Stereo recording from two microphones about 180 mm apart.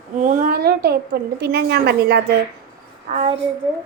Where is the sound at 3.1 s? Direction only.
35° right (ahead or behind).